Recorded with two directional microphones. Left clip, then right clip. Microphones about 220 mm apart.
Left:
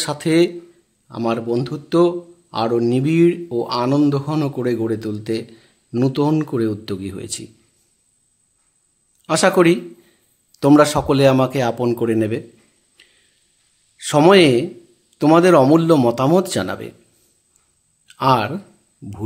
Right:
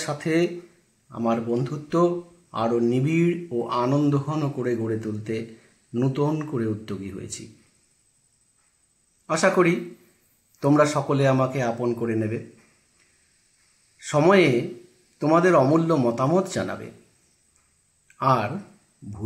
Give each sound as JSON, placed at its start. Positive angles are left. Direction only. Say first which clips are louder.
{"t": 0.0, "sound": "speech", "louder": "left 7 dB", "side_deg": 55}
{"t": 9.2, "sound": "speech", "louder": "left 6 dB", "side_deg": 55}
{"t": 13.9, "sound": "speech", "louder": "left 6 dB", "side_deg": 55}
{"t": 18.0, "sound": "a sound", "louder": "left 5 dB", "side_deg": 55}